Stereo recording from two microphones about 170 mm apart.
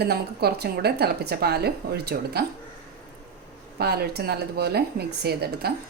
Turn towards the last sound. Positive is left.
turn(degrees=-70)  # may be behind; listen again after turning